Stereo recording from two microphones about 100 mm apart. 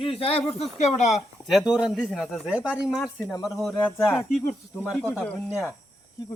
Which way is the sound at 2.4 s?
10° right (ahead or behind).